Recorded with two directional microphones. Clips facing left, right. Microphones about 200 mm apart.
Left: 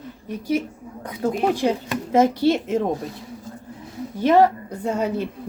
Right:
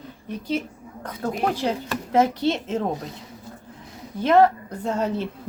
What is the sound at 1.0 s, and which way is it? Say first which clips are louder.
A woman's voice: left 4 dB; 10° left (ahead or behind).